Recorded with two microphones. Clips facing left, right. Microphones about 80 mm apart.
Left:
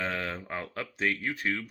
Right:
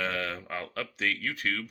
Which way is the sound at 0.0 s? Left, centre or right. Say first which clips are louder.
Right 1 dB; left.